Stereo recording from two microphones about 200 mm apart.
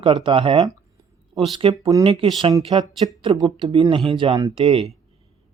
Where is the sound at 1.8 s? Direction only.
20° right (ahead or behind).